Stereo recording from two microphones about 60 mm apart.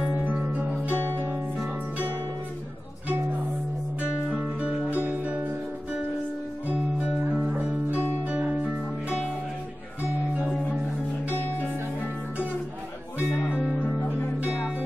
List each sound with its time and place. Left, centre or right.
0.1 s music: right
4.3 s music: centre
6.7 s music: centre
8.2 s music: right
11.2 s music: left
13.3 s music: centre